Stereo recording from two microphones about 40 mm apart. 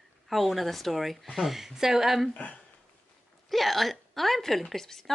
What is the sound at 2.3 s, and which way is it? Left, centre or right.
Speech, left.